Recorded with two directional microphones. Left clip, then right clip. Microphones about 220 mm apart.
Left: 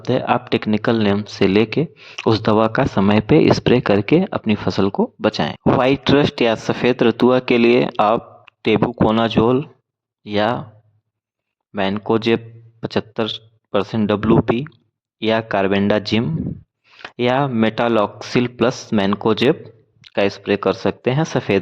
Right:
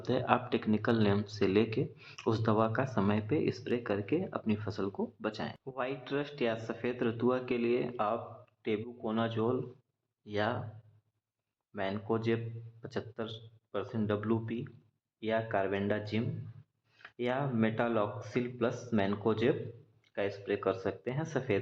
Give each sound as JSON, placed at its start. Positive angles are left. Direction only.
{"t": 0.0, "sound": "speech", "side_deg": 40}
{"t": 11.7, "sound": "speech", "side_deg": 45}